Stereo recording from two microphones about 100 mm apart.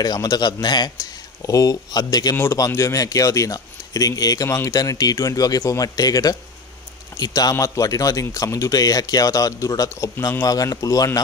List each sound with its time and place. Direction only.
0.0 s a man's voice: 40° left (ahead or behind)
2.3 s a man's voice: 25° left (ahead or behind)